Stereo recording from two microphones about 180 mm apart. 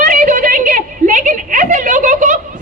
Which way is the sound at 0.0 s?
45° right (ahead or behind).